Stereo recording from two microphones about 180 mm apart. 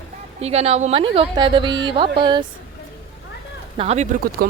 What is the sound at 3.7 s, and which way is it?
Speech, 35° right (ahead or behind).